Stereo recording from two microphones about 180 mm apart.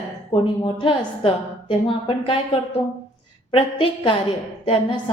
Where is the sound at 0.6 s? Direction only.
30° left (ahead or behind).